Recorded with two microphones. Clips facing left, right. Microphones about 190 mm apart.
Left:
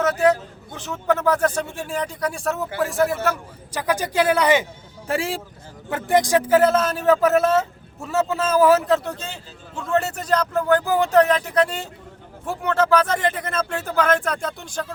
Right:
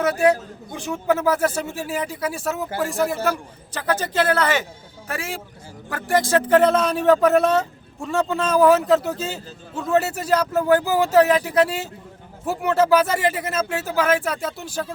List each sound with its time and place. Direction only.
0.0 s a man's voice: 10° right (ahead or behind)
3.8 s speech: 10° left (ahead or behind)
5.0 s a man's voice: 30° left (ahead or behind); by 14.9 s 5° right (ahead or behind)